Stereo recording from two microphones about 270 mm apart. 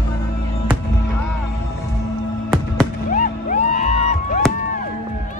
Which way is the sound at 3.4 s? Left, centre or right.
Left.